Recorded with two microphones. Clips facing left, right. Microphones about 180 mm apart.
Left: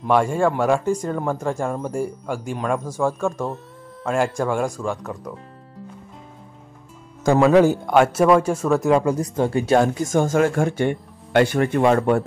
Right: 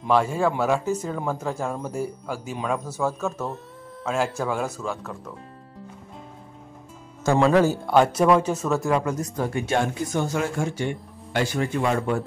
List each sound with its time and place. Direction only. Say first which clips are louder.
0.0 s a man's voice: left 3 dB; 5° right (ahead or behind)
1.7 s speech: left 4 dB; 10° left (ahead or behind)
2.5 s a man's voice: left 3 dB; centre (ahead or behind)
7.3 s speech: left 4 dB; 10° left (ahead or behind)
8.7 s speech: left 7 dB; 20° left (ahead or behind); by 12.2 s 60° left (ahead or behind)